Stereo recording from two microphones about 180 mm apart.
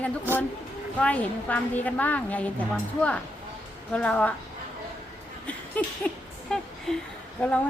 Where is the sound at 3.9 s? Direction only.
5° left (ahead or behind).